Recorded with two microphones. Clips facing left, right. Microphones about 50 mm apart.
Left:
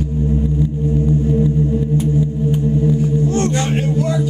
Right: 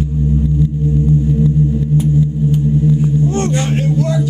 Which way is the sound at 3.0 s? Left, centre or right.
Right.